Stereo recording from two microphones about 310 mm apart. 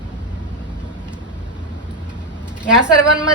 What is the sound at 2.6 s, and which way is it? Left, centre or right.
Speech, centre.